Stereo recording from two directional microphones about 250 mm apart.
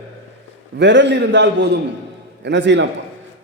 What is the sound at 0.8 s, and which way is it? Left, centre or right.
A man's voice, right.